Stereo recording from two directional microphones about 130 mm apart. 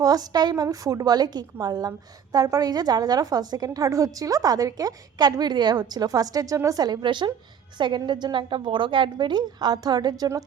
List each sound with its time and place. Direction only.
0.0 s a woman's voice: 30° right (ahead or behind)